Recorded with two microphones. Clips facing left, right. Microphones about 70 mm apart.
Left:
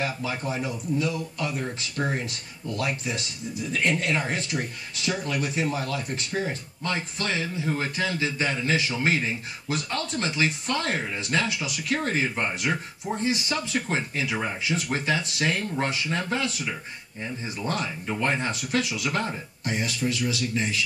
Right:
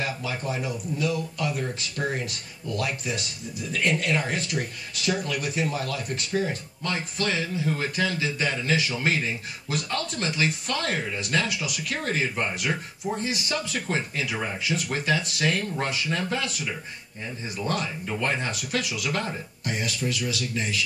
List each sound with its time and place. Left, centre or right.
0.0 s speech: left
17.6 s speech: left